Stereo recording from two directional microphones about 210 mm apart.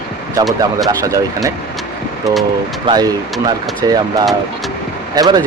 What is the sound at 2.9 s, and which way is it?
Speech, 20° right (ahead or behind).